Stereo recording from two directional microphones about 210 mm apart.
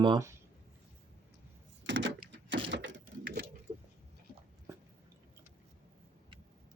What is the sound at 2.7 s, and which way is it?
Sewing machine, 60° right (ahead or behind).